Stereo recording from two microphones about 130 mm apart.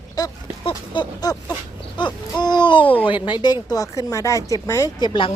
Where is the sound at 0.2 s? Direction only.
30° left (ahead or behind).